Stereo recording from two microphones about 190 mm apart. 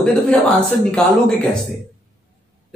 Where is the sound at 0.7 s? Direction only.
5° left (ahead or behind).